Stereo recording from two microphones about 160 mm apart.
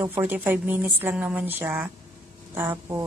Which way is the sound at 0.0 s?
10° right (ahead or behind).